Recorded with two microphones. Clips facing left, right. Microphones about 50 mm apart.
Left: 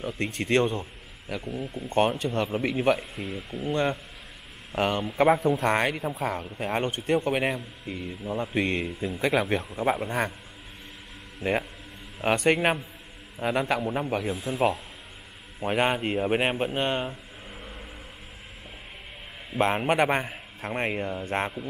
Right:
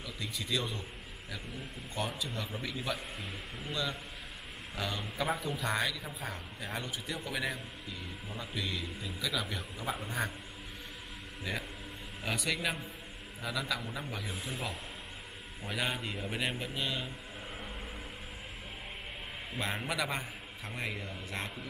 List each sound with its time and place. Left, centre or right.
0.0 s speech: left
3.7 s speech: left
12.2 s speech: left
14.3 s speech: centre
15.6 s speech: left
19.6 s speech: left